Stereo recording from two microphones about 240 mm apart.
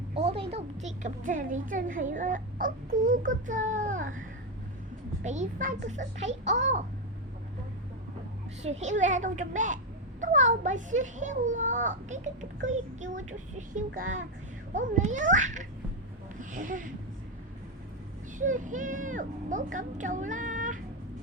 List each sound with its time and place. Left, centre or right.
0.1 s a woman's voice: right
5.2 s a child's voice: right
8.6 s a woman's voice: right
18.3 s a woman's voice: right